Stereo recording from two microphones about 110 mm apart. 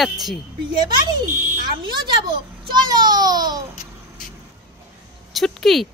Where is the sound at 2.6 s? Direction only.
40° right (ahead or behind).